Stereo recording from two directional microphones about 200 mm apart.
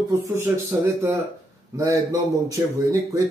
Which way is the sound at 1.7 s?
15° right (ahead or behind).